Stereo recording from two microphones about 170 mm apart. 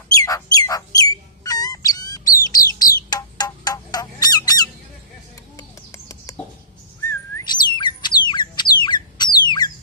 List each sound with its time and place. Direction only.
0.2 s fowl: 20° left (ahead or behind)
1.5 s bird: 20° left (ahead or behind)
8.8 s a sound: 25° left (ahead or behind)